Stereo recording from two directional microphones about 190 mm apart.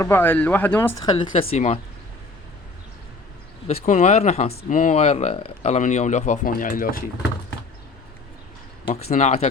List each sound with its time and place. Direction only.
0.0 s speech: 10° left (ahead or behind)
1.0 s speech: 25° left (ahead or behind)
3.7 s speech: 35° left (ahead or behind)
9.0 s speech: 35° left (ahead or behind)